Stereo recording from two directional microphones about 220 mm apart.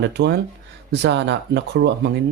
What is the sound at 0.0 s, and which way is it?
Speech, 50° right (ahead or behind).